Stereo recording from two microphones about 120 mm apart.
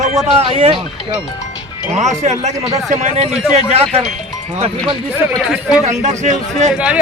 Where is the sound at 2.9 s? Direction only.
80° right.